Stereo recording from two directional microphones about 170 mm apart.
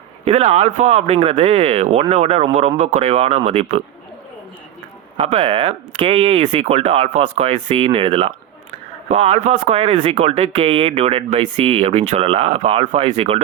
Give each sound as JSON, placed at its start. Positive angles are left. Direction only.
{"t": 0.3, "sound": "speech", "side_deg": -40}
{"t": 5.1, "sound": "speech", "side_deg": -40}